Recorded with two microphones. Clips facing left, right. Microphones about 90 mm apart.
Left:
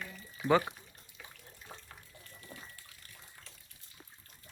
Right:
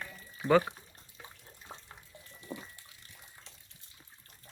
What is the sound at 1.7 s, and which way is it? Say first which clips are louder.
Water: right 2 dB; 25° right (ahead or behind).